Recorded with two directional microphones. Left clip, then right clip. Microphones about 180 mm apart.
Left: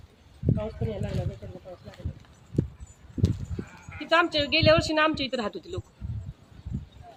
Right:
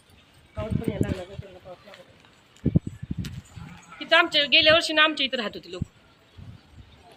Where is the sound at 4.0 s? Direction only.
35° left (ahead or behind).